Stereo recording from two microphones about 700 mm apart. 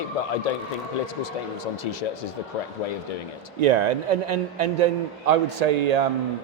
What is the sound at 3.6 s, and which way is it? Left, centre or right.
A man's voice, right.